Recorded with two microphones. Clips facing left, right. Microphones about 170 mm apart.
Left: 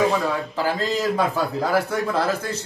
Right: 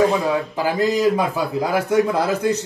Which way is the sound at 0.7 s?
15° right (ahead or behind).